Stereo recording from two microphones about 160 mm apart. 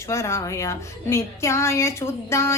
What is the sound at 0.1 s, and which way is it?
A woman's voice, 15° left (ahead or behind).